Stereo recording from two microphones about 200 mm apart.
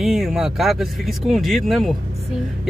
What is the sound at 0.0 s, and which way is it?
Speech, centre (ahead or behind).